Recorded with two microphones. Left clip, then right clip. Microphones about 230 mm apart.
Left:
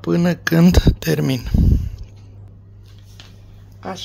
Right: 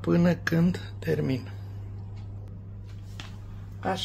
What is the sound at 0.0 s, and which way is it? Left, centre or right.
Speech, left.